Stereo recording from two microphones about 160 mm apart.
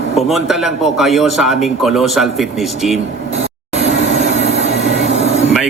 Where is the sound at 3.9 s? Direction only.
45° left (ahead or behind).